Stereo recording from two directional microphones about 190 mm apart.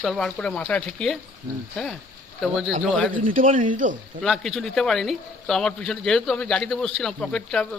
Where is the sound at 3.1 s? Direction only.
45° right (ahead or behind).